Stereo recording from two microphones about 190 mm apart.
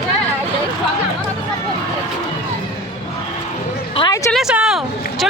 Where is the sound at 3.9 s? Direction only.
20° left (ahead or behind).